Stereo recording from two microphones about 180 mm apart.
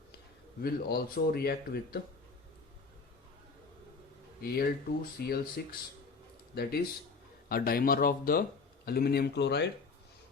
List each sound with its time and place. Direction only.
0.6 s speech: 60° left (ahead or behind)
4.4 s speech: 55° left (ahead or behind)